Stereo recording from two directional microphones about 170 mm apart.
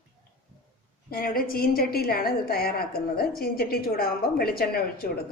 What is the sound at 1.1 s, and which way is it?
A woman's voice, 60° left (ahead or behind).